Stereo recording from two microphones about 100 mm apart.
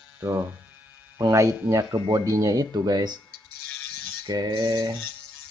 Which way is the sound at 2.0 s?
55° right (ahead or behind).